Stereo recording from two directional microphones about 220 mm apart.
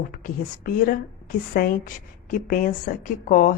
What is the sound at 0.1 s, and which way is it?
A woman's voice, 40° left (ahead or behind).